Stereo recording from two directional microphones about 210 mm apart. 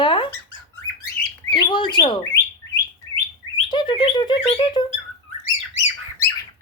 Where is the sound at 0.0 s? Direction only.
20° left (ahead or behind).